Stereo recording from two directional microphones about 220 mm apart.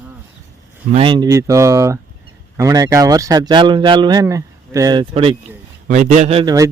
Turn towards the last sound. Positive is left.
turn(degrees=-25)  # may be behind; listen again after turning